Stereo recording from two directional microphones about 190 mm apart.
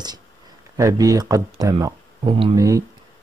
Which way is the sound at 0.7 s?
20° right (ahead or behind).